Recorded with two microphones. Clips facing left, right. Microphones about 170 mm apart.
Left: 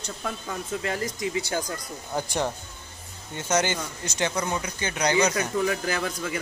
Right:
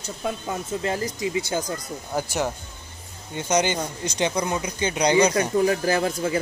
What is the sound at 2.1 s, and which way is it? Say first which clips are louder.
Speech: right 2 dB; 5° right (ahead or behind).